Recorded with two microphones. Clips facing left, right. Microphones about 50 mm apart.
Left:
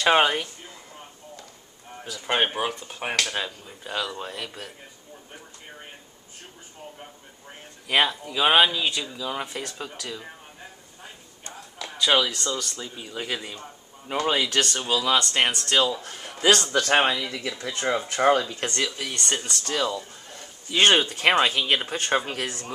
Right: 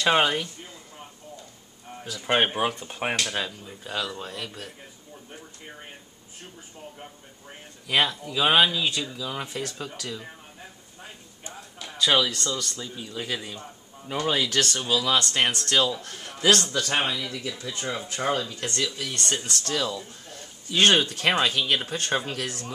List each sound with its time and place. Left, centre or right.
0.0 s speech: centre
2.0 s a sound: centre
2.2 s speech: centre
3.3 s speech: centre
7.9 s speech: centre
12.0 s speech: centre
14.0 s speech: left
16.6 s speech: left